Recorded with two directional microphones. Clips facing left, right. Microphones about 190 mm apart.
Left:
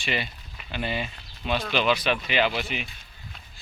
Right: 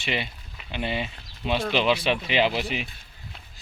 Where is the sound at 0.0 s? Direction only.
20° right (ahead or behind).